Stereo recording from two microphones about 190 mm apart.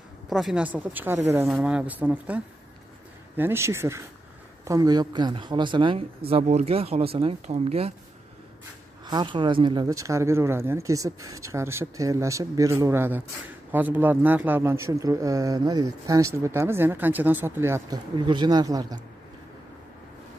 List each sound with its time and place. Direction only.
0.3 s speech: centre (ahead or behind); by 7.9 s 35° right (ahead or behind)
9.0 s speech: 25° right (ahead or behind)